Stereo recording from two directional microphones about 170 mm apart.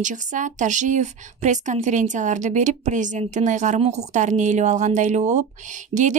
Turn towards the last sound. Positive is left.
turn(degrees=-45)  # may be behind; listen again after turning